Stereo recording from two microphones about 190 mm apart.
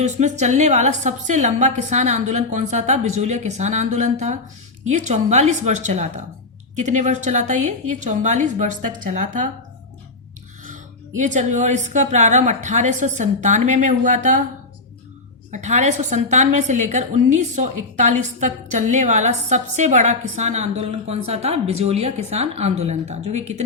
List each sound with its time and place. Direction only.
0.0 s a woman's voice: 40° right (ahead or behind)
11.2 s a woman's voice: 40° right (ahead or behind)
15.5 s a woman's voice: 40° right (ahead or behind)